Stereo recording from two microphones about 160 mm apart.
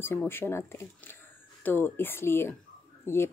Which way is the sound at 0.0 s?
15° left (ahead or behind).